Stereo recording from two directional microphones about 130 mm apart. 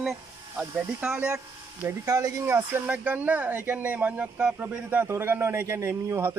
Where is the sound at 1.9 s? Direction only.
25° right (ahead or behind).